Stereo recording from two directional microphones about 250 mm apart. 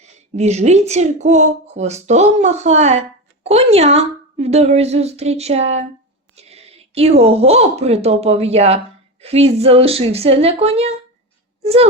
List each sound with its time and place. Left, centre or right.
0.0 s speech: right
11.6 s child singing: right